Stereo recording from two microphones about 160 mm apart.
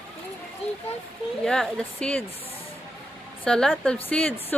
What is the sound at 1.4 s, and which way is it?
Speech, 5° left (ahead or behind).